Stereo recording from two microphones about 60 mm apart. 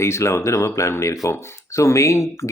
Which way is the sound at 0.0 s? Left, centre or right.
Left.